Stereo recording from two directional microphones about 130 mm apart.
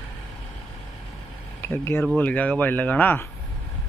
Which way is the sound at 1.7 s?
20° left (ahead or behind).